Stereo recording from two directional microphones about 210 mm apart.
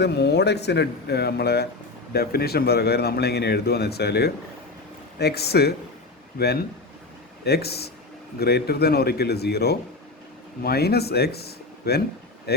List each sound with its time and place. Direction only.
0.0 s speech: 55° left (ahead or behind)